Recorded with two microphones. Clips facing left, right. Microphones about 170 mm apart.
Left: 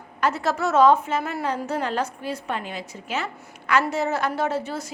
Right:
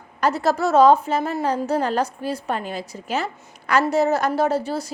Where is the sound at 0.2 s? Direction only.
35° right (ahead or behind).